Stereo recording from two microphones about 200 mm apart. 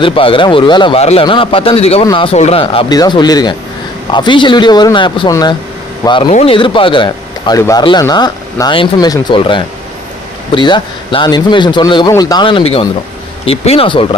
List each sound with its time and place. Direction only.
0.0 s a man's voice: 25° left (ahead or behind)